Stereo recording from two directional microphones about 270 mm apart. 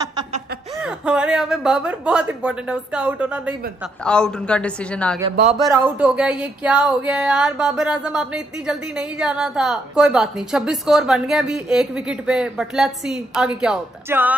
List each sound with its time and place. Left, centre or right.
0.7 s speech: centre
5.3 s a man's voice: right
5.7 s speech: centre